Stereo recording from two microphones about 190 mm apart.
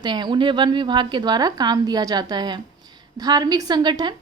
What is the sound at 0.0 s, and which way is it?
A woman's voice, 25° right (ahead or behind).